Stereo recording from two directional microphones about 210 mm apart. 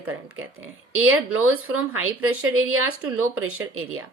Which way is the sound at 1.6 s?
85° right.